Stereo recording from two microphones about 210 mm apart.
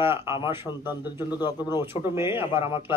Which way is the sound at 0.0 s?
10° right (ahead or behind).